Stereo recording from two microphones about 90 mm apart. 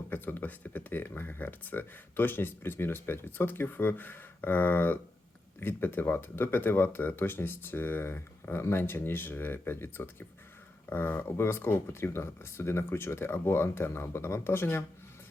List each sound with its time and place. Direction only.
0.1 s speech: 20° left (ahead or behind)